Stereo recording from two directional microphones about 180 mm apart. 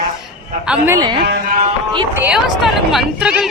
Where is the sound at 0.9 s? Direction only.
20° right (ahead or behind).